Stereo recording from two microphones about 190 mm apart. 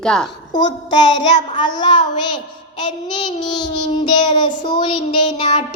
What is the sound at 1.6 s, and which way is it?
Child singing, 25° left (ahead or behind).